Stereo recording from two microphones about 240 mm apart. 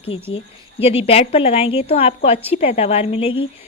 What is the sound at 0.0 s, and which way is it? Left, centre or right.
A woman's voice, left.